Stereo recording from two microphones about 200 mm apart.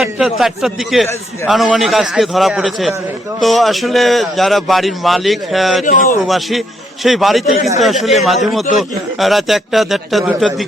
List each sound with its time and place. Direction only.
0.0 s a man's voice: centre (ahead or behind)
5.8 s speech: 40° left (ahead or behind)
6.2 s a man's voice: centre (ahead or behind)